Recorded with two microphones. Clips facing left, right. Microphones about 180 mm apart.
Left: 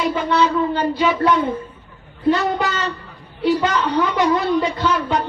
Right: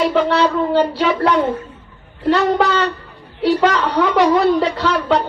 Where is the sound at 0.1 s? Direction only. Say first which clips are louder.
Right 3 dB; 70° right (ahead or behind).